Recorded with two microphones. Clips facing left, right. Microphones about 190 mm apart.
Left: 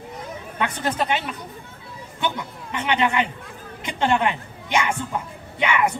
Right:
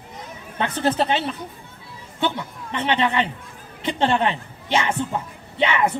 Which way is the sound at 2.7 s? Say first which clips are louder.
Right 1 dB; 35° right (ahead or behind).